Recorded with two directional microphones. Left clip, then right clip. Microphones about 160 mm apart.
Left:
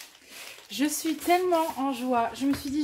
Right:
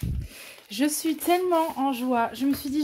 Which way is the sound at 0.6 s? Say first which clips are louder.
Right 3 dB; 45° right (ahead or behind).